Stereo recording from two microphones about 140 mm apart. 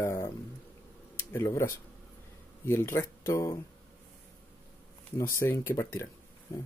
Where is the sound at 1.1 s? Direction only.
20° left (ahead or behind).